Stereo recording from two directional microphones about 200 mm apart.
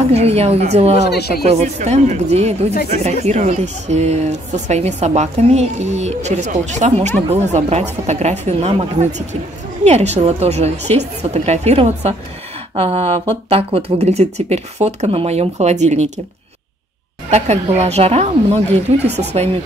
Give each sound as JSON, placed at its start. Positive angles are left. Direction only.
{"t": 0.1, "sound": "a woman's voice", "side_deg": -30}
{"t": 0.9, "sound": "speech", "side_deg": 55}
{"t": 1.4, "sound": "a woman's voice", "side_deg": -35}
{"t": 17.3, "sound": "a woman's voice", "side_deg": -35}
{"t": 19.0, "sound": "speech", "side_deg": -55}